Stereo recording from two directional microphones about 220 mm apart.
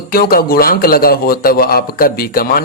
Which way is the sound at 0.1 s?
40° left (ahead or behind).